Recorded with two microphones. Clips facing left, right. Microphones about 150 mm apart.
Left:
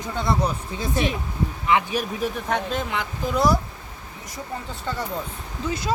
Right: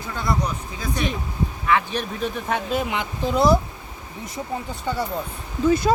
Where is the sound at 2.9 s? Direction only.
25° right (ahead or behind).